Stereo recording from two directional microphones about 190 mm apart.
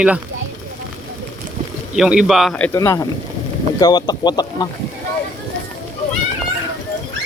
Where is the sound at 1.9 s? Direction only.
Centre (ahead or behind).